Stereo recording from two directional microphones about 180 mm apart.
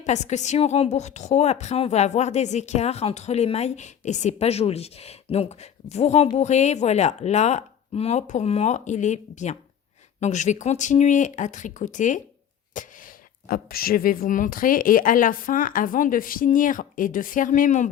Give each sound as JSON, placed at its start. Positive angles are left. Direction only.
{"t": 0.0, "sound": "a woman's voice", "side_deg": 40}
{"t": 13.5, "sound": "a woman's voice", "side_deg": 55}